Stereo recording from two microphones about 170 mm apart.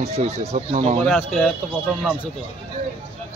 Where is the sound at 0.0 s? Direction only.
40° right (ahead or behind).